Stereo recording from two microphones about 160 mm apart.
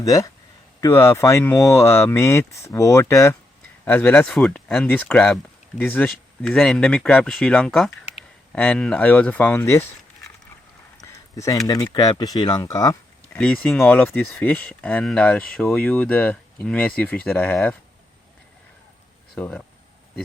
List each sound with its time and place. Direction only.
0.0 s speech: 20° left (ahead or behind)
11.3 s speech: 20° left (ahead or behind)
13.3 s speech: 5° left (ahead or behind)
19.3 s speech: 5° left (ahead or behind)